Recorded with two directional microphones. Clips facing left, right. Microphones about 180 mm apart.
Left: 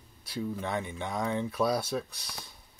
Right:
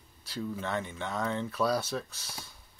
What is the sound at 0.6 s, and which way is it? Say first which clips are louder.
Speech: left 1 dB; 15° left (ahead or behind).